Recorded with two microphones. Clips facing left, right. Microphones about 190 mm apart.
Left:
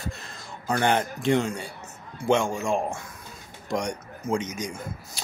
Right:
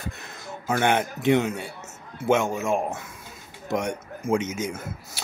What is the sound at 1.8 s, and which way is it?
Music, 20° right (ahead or behind).